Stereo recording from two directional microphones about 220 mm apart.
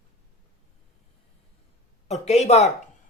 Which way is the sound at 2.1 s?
30° left (ahead or behind).